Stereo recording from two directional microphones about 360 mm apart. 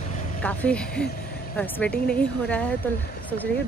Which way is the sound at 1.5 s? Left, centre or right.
Centre.